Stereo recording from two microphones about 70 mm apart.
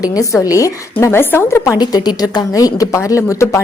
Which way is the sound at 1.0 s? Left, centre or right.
Left.